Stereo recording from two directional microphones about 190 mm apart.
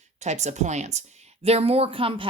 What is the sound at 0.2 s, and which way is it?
Speech, 35° right (ahead or behind).